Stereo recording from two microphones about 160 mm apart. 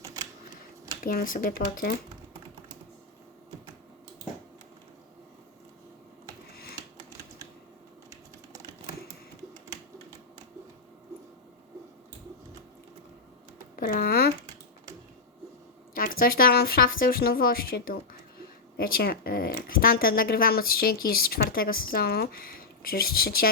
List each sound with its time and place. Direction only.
1.0 s a woman's voice: 65° left (ahead or behind)
13.7 s a sound: 65° left (ahead or behind)
16.0 s a woman's voice: 60° left (ahead or behind)